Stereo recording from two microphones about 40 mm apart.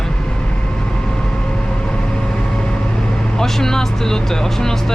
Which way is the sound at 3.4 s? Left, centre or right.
Centre.